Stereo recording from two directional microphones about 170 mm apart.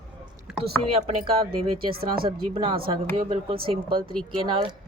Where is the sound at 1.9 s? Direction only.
60° right (ahead or behind).